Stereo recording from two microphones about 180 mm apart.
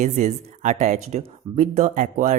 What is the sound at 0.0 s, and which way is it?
Speech, 40° right (ahead or behind).